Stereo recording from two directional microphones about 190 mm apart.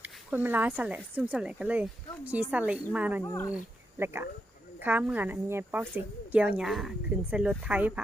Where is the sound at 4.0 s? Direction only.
15° right (ahead or behind).